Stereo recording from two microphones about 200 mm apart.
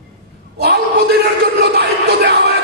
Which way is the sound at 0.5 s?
55° right (ahead or behind).